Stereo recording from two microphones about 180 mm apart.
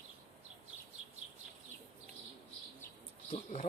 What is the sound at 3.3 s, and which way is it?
Speech, 40° left (ahead or behind).